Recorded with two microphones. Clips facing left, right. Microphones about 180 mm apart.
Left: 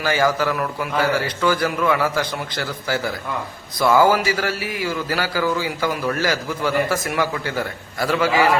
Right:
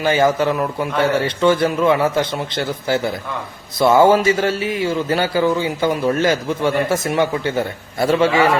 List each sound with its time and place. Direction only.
0.0 s a man's voice: 25° right (ahead or behind)